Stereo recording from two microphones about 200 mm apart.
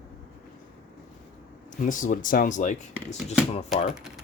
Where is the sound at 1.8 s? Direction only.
40° left (ahead or behind).